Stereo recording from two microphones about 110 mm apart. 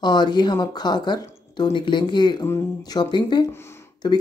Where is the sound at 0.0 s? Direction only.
40° left (ahead or behind).